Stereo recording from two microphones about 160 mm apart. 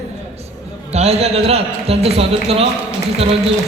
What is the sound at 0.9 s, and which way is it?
Speech, 40° right (ahead or behind).